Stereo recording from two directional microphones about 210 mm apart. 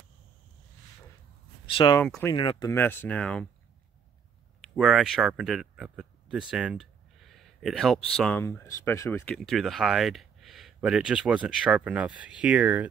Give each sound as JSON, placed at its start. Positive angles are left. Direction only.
{"t": 1.7, "sound": "speech", "side_deg": 25}
{"t": 2.0, "sound": "speech", "side_deg": 5}
{"t": 2.2, "sound": "speech", "side_deg": 20}
{"t": 2.7, "sound": "speech", "side_deg": 10}
{"t": 4.6, "sound": "speech", "side_deg": 0}